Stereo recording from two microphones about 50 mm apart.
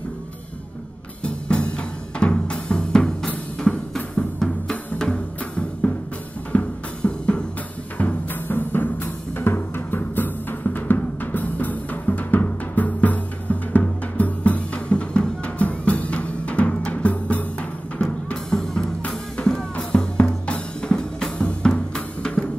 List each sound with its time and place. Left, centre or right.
1.2 s music: left
3.3 s drum kit: left
4.4 s music: centre
8.0 s timpani: left
11.3 s music: left
18.0 s music: centre
19.3 s drum: centre
22.2 s drum kit: centre